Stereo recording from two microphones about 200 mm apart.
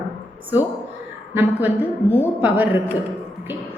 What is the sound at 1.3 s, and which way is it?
Speech, 10° right (ahead or behind).